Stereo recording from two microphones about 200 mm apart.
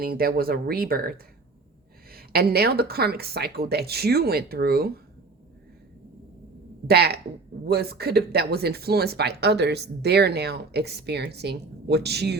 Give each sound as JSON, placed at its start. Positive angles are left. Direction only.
{"t": 0.0, "sound": "speech", "side_deg": -50}
{"t": 6.8, "sound": "speech", "side_deg": -50}